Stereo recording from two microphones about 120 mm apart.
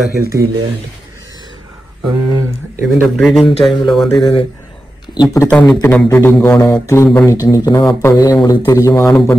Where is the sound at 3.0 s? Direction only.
Centre (ahead or behind).